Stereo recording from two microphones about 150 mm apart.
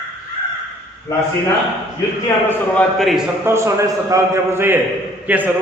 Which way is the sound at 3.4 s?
20° right (ahead or behind).